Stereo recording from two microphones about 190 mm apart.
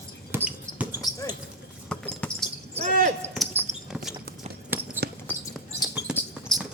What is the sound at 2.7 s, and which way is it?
Basketball bounce, 40° right (ahead or behind).